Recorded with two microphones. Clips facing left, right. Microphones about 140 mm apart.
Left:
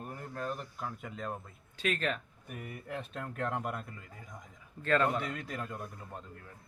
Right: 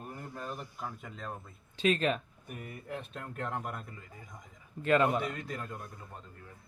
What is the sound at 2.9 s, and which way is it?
Speech, centre (ahead or behind).